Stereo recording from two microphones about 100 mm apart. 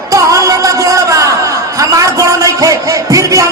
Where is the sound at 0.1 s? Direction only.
35° right (ahead or behind).